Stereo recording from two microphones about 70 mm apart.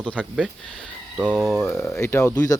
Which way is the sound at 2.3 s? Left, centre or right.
Left.